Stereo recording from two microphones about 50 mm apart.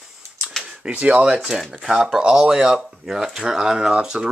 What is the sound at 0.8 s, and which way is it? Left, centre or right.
Speech, right.